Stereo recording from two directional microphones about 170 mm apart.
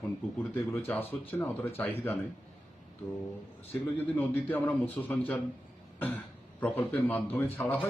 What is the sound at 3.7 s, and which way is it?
A man's voice, 10° left (ahead or behind).